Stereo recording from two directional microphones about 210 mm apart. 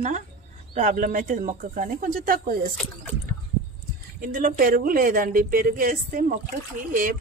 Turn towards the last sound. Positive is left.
turn(degrees=-40)  # may be behind; listen again after turning